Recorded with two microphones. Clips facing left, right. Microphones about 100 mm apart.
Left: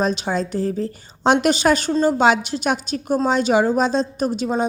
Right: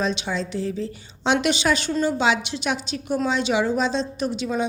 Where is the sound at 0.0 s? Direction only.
45° left (ahead or behind).